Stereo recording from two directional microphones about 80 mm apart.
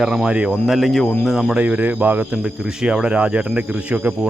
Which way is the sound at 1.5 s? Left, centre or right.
Centre.